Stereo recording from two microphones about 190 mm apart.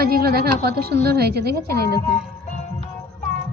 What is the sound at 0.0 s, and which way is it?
A woman's voice, 55° right (ahead or behind).